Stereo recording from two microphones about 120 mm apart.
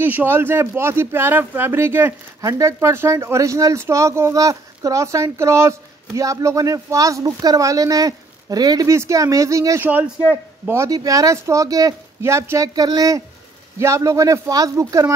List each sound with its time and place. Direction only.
0.0 s a man's voice: 15° right (ahead or behind)
9.8 s a man's voice: 15° right (ahead or behind)